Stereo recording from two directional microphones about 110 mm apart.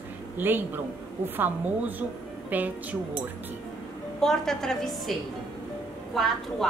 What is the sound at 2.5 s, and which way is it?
Speech, 15° right (ahead or behind).